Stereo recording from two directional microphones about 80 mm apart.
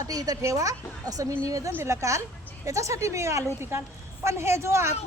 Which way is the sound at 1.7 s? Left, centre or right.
Right.